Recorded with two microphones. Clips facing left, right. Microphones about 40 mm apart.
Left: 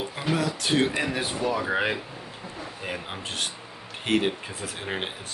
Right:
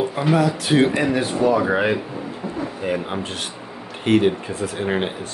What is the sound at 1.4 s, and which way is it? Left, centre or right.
Speech, right.